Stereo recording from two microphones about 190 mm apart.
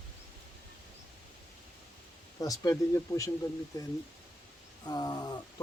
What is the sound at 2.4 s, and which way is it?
Speech, 20° left (ahead or behind).